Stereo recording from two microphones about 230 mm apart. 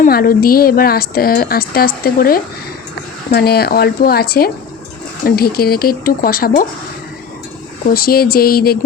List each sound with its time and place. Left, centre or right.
0.0 s a woman's voice: left
7.9 s a woman's voice: left